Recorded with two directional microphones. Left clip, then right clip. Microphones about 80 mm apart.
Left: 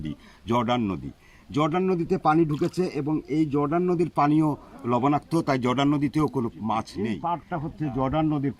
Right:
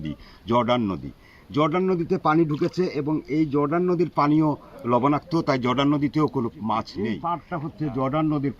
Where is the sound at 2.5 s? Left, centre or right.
Centre.